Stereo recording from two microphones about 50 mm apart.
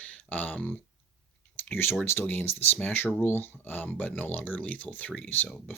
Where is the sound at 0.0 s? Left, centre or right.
Left.